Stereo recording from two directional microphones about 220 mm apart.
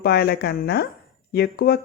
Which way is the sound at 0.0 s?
45° left (ahead or behind).